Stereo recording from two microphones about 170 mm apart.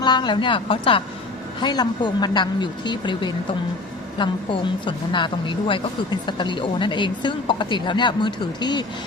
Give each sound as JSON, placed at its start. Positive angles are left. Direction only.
{"t": 0.0, "sound": "speech", "side_deg": 25}